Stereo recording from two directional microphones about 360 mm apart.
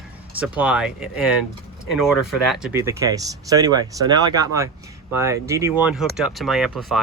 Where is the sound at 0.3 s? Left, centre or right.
Centre.